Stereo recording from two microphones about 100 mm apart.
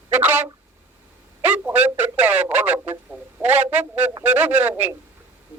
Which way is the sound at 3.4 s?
20° right (ahead or behind).